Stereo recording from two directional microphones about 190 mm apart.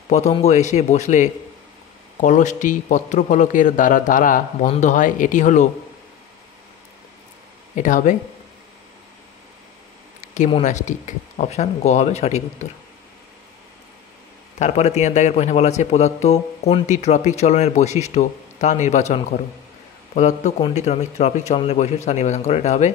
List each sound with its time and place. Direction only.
0.1 s a man's voice: 35° left (ahead or behind)
7.7 s a man's voice: 40° left (ahead or behind)
10.3 s a man's voice: 40° left (ahead or behind)
14.6 s a man's voice: 35° left (ahead or behind)